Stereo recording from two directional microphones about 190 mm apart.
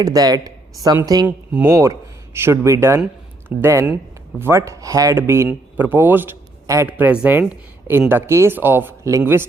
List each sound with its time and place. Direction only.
0.0 s a woman's voice: 20° right (ahead or behind)